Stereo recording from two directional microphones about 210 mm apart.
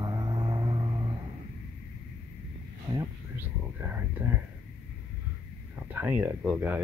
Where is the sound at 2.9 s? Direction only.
10° right (ahead or behind).